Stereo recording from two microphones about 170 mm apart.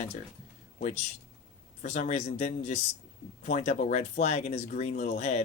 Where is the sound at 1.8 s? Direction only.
45° left (ahead or behind).